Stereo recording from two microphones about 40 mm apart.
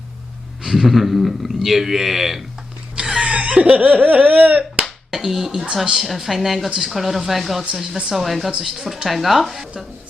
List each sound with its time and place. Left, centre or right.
0.6 s speech: centre
3.1 s a sound: centre
3.3 s speech: right
5.1 s speech: centre